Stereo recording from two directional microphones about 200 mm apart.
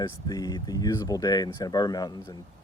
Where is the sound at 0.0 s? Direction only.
20° left (ahead or behind).